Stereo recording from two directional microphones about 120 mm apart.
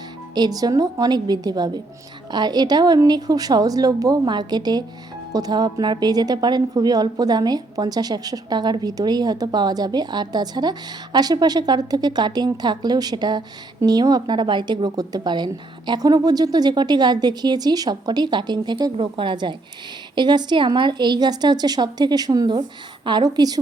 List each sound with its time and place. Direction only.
0.3 s a woman's voice: 35° right (ahead or behind)